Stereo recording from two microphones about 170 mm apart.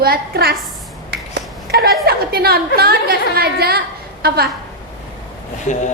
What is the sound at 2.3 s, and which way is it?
A woman's voice, 65° right (ahead or behind).